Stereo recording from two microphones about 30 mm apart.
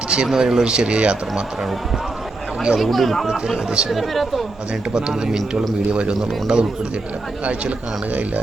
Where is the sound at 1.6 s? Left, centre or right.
Centre.